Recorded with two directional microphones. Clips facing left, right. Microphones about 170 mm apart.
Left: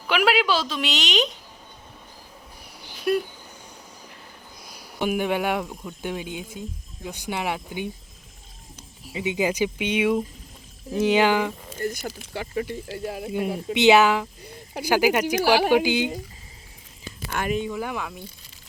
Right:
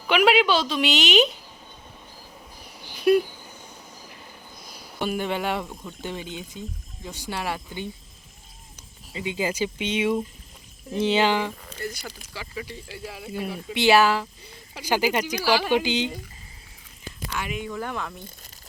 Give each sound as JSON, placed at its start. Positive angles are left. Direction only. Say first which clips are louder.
{"t": 0.1, "sound": "a woman's voice", "louder": "right 2 dB", "side_deg": 0}
{"t": 3.0, "sound": "a sound", "louder": "right 5 dB", "side_deg": -5}
{"t": 4.9, "sound": "speech", "louder": "left 3 dB", "side_deg": 15}
{"t": 9.0, "sound": "speech", "louder": "left 3 dB", "side_deg": 15}
{"t": 11.8, "sound": "speech", "louder": "left 6 dB", "side_deg": 45}
{"t": 13.3, "sound": "speech", "louder": "left 4 dB", "side_deg": 20}
{"t": 17.3, "sound": "speech", "louder": "left 6 dB", "side_deg": 45}
{"t": 17.7, "sound": "speech", "louder": "left 2 dB", "side_deg": 10}